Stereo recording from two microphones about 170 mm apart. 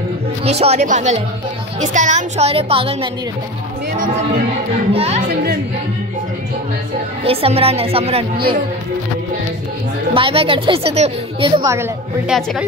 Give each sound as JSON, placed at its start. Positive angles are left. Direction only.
{"t": 0.5, "sound": "a woman's voice", "side_deg": -40}
{"t": 4.9, "sound": "a woman's voice", "side_deg": -40}
{"t": 7.2, "sound": "a woman's voice", "side_deg": -35}
{"t": 10.1, "sound": "a woman's voice", "side_deg": -30}
{"t": 11.6, "sound": "a woman's voice", "side_deg": -15}
{"t": 12.3, "sound": "speech", "side_deg": 0}